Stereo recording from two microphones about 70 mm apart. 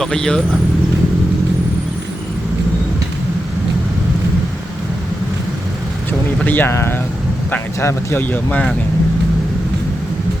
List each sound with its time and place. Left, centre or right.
0.0 s speech: centre
6.4 s speech: left
7.8 s speech: left
8.2 s speech: left